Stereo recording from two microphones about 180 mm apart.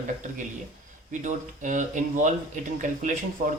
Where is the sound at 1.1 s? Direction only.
45° right (ahead or behind).